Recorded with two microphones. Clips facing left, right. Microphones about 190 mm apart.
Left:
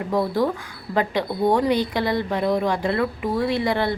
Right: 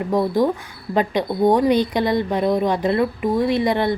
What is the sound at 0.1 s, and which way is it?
A woman's voice, 20° right (ahead or behind).